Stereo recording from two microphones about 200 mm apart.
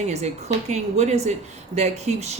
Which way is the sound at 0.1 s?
35° right (ahead or behind).